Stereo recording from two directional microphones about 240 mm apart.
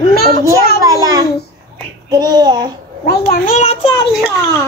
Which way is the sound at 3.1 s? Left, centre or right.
Left.